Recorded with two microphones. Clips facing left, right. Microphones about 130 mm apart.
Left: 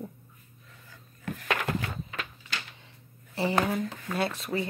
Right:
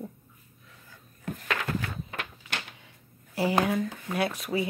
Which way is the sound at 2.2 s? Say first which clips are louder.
Right 1 dB; 60° right (ahead or behind).